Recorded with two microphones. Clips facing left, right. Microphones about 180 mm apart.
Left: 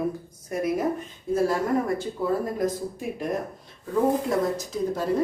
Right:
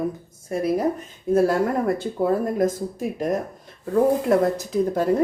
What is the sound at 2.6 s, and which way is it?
Speech, 45° right (ahead or behind).